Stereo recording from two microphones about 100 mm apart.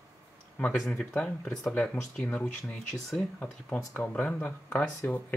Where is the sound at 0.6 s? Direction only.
10° left (ahead or behind).